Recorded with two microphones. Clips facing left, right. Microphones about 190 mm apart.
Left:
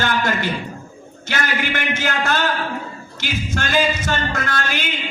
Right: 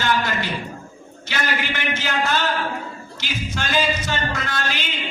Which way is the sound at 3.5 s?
50° left (ahead or behind).